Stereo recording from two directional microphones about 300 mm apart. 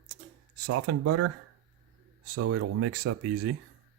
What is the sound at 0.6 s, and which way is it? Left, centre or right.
Speech, right.